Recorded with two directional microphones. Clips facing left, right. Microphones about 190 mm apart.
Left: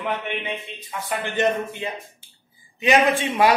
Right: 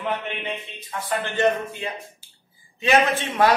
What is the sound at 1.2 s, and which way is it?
A man's voice, 20° left (ahead or behind).